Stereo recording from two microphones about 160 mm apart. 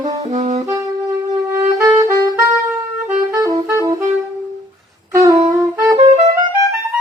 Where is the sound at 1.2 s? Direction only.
20° right (ahead or behind).